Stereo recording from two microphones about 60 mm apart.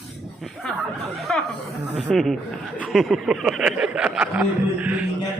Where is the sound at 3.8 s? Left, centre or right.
Centre.